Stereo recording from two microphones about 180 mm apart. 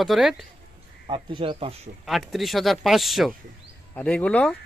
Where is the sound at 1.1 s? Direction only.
25° right (ahead or behind).